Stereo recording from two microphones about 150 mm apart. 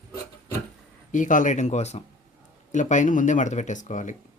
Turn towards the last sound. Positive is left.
turn(degrees=55)  # may be behind; listen again after turning